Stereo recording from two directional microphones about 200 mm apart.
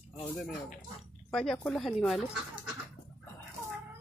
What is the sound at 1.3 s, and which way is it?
Speech, 5° left (ahead or behind).